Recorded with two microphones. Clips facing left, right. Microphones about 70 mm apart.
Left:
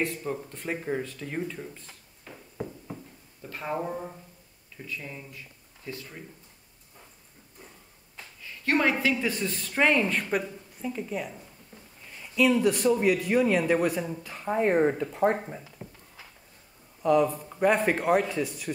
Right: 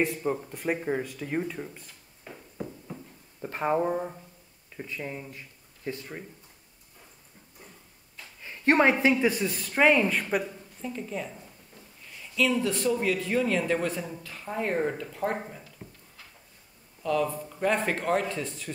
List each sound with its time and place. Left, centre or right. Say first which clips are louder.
0.0 s speech: right 3 dB; centre
3.4 s a sound: right 7 dB; right
3.7 s speech: right 4 dB; right
8.4 s a woman's voice: right 4 dB; right
9.3 s speech: right 1 dB; centre
12.2 s a man's voice: left 3 dB; centre
15.8 s a sound: left 3 dB; centre
17.0 s a man's voice: left 5 dB; left